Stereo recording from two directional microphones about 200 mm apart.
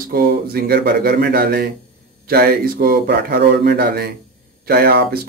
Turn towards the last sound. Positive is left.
turn(degrees=-50)  # may be behind; listen again after turning